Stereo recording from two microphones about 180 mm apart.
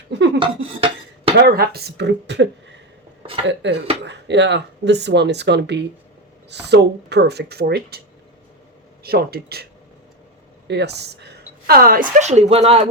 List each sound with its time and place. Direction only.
0.3 s dishes: 30° right (ahead or behind)
1.4 s speech: 60° right (ahead or behind)
9.0 s a woman's voice: 60° right (ahead or behind)
10.7 s a woman's voice: 70° right (ahead or behind); by 12.8 s 35° right (ahead or behind)